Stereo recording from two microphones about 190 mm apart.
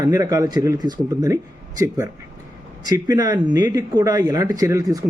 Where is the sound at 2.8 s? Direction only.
20° right (ahead or behind).